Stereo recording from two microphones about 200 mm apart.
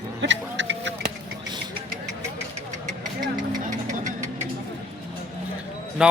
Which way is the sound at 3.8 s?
35° right (ahead or behind).